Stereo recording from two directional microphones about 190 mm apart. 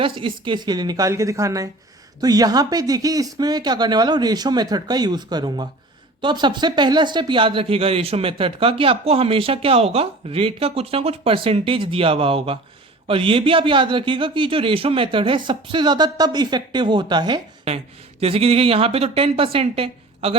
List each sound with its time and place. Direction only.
0.0 s a woman's voice: 25° right (ahead or behind)